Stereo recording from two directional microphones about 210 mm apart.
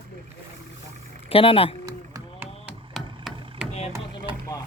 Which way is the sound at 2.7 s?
Centre (ahead or behind).